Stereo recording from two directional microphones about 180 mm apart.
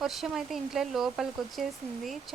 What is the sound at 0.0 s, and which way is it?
A woman's voice, centre (ahead or behind).